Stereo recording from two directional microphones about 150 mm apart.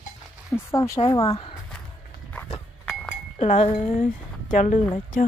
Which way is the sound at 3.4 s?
45° left (ahead or behind).